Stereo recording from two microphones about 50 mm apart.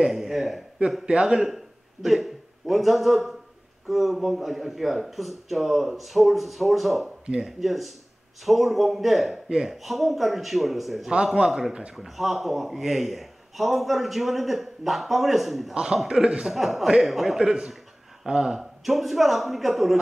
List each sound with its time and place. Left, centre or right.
0.0 s a man's voice: centre
1.0 s a man's voice: centre
1.5 s a man's voice: centre
11.9 s a man's voice: centre
15.7 s a man's voice: centre
16.5 s a man's voice: centre